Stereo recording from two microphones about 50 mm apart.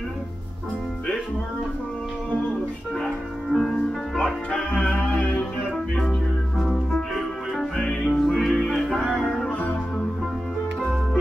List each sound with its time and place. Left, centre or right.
3.5 s music: centre
4.2 s music: centre
6.6 s music: centre
7.7 s music: left
8.3 s music: centre
9.5 s music: left